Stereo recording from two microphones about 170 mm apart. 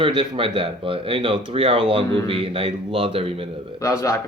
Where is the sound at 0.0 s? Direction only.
30° right (ahead or behind).